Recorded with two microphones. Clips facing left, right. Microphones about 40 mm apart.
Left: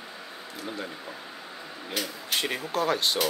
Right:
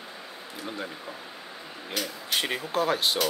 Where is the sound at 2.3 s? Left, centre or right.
Centre.